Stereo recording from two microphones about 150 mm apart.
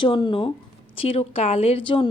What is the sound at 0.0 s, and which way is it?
A woman's voice, 35° left (ahead or behind).